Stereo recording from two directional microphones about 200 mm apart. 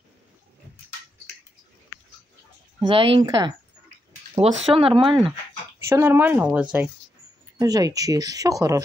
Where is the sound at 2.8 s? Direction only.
25° right (ahead or behind).